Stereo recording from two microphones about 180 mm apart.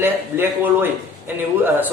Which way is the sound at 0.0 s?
10° right (ahead or behind).